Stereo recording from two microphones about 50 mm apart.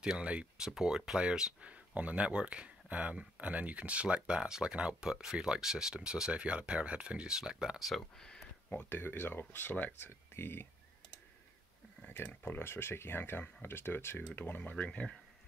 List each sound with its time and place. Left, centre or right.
0.2 s speech: right
0.7 s speech: centre
1.6 s speech: right
8.8 s speech: left
10.3 s speech: left
12.1 s speech: left